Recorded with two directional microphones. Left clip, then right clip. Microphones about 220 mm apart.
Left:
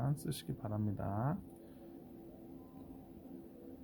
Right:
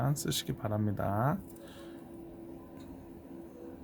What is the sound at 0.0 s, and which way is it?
Speech, 15° right (ahead or behind).